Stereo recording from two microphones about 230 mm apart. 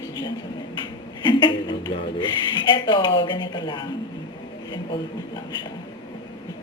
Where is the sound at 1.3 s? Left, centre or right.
Left.